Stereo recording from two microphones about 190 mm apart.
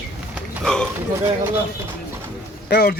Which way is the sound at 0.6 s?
5° left (ahead or behind).